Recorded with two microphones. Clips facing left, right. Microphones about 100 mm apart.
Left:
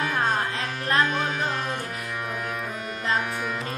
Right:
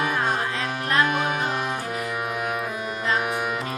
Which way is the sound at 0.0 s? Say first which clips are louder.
Right 1 dB; 15° right (ahead or behind).